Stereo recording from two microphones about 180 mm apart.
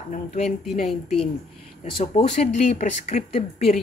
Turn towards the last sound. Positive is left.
turn(degrees=40)  # may be behind; listen again after turning